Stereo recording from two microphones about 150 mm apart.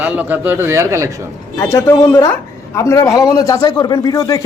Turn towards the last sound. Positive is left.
turn(degrees=25)  # may be behind; listen again after turning